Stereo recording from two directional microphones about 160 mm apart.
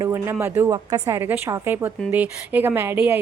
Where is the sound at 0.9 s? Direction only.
25° right (ahead or behind).